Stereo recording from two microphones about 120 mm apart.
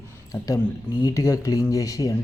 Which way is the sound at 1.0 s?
25° left (ahead or behind).